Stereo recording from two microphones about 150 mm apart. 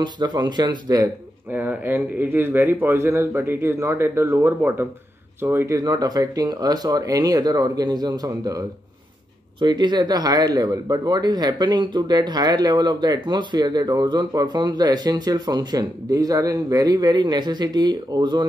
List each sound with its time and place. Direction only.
0.0 s speech: 30° right (ahead or behind)
1.5 s speech: 10° right (ahead or behind); by 18.4 s 30° right (ahead or behind)